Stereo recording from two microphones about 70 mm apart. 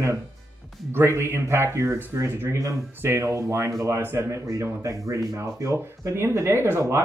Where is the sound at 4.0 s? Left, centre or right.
Right.